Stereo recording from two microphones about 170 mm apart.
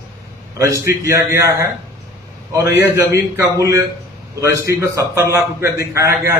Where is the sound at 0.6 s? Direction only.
20° right (ahead or behind).